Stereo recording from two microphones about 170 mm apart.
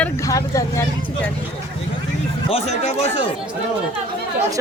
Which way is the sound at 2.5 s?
40° left (ahead or behind).